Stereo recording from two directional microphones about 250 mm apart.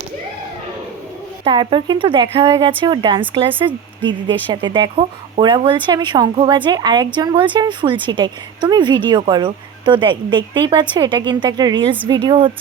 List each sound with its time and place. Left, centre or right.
1.5 s speech: centre